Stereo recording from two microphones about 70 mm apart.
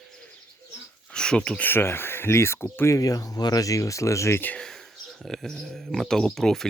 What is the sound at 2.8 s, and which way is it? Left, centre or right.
Speech, left.